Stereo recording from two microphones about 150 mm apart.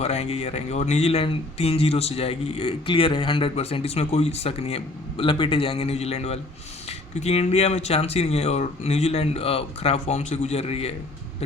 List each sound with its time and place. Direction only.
0.0 s speech: 45° left (ahead or behind)